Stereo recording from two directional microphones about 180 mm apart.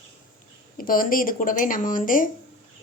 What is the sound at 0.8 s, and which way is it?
Speech, 50° left (ahead or behind).